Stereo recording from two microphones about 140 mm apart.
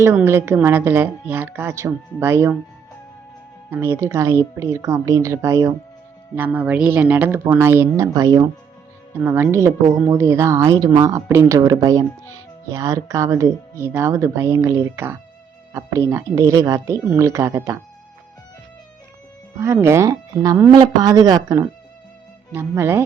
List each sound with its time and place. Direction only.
0.0 s a woman's voice: 20° right (ahead or behind)
3.7 s a woman's voice: 15° right (ahead or behind)
19.5 s a woman's voice: 20° right (ahead or behind)